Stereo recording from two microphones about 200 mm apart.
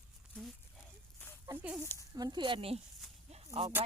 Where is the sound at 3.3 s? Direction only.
30° right (ahead or behind).